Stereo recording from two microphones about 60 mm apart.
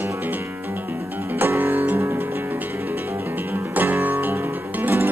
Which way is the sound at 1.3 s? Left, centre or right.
Right.